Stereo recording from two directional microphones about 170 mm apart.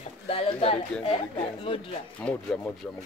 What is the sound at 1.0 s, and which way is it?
Speech, 35° left (ahead or behind).